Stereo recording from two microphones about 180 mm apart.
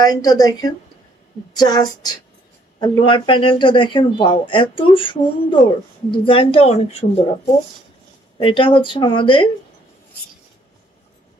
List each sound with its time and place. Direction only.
0.0 s a woman's voice: 20° left (ahead or behind)
8.4 s speech: 30° left (ahead or behind)